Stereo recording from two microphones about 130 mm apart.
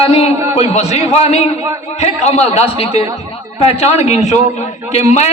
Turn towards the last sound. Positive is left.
turn(degrees=60)  # may be behind; listen again after turning